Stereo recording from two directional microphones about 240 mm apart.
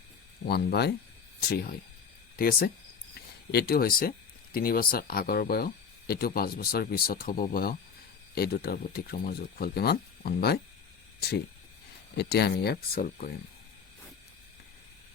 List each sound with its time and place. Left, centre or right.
0.4 s speech: left